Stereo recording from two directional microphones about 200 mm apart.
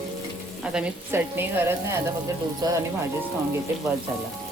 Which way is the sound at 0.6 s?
5° right (ahead or behind).